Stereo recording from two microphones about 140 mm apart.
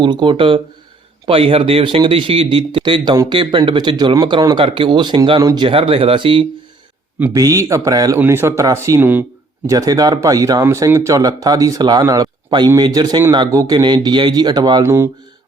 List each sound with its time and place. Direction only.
0.0 s speech: 35° right (ahead or behind)
5.4 s speech: 25° right (ahead or behind)
5.6 s speech: 40° right (ahead or behind)
7.3 s speech: 25° right (ahead or behind)
9.6 s speech: 25° right (ahead or behind)
14.8 s speech: 20° right (ahead or behind)